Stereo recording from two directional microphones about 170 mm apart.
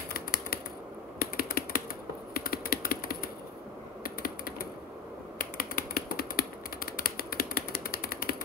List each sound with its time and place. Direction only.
0.1 s typewriter: 65° left (ahead or behind)
1.2 s typing: 60° left (ahead or behind)
2.3 s computer keyboard: 60° left (ahead or behind)
4.0 s typing: 60° left (ahead or behind)